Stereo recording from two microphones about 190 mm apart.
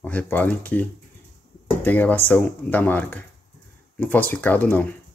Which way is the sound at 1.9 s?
10° left (ahead or behind).